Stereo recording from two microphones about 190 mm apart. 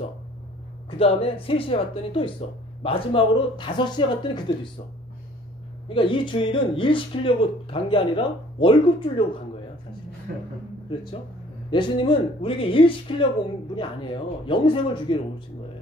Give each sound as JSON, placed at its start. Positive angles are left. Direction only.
{"t": 0.8, "sound": "speech", "side_deg": 30}
{"t": 5.9, "sound": "speech", "side_deg": 25}
{"t": 10.3, "sound": "a man's voice", "side_deg": -55}
{"t": 11.7, "sound": "speech", "side_deg": 25}
{"t": 14.4, "sound": "speech", "side_deg": 25}